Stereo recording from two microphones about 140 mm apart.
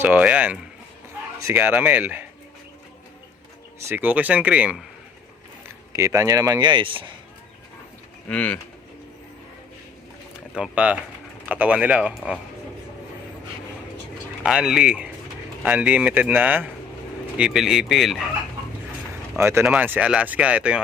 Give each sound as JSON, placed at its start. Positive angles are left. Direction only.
{"t": 0.0, "sound": "speech", "side_deg": -10}
{"t": 3.8, "sound": "speech", "side_deg": -15}
{"t": 5.9, "sound": "speech", "side_deg": -20}
{"t": 8.3, "sound": "speech", "side_deg": 10}
{"t": 10.5, "sound": "speech", "side_deg": -10}
{"t": 14.4, "sound": "speech", "side_deg": -5}
{"t": 19.4, "sound": "speech", "side_deg": -20}